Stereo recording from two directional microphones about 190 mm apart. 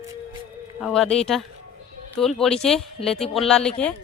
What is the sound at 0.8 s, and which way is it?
Speech, centre (ahead or behind).